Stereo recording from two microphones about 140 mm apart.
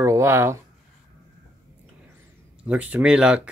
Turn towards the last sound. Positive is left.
turn(degrees=-5)  # may be behind; listen again after turning